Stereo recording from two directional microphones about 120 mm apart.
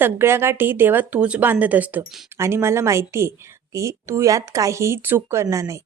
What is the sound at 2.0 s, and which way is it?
A woman's voice, 25° right (ahead or behind).